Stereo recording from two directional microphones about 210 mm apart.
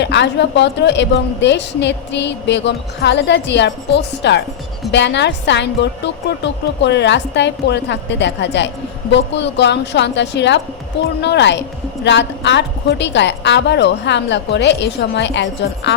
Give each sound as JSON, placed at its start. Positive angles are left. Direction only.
{"t": 0.0, "sound": "a woman's voice", "side_deg": 55}